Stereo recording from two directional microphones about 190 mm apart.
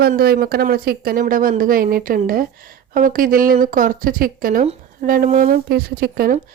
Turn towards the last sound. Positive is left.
turn(degrees=-50)  # may be behind; listen again after turning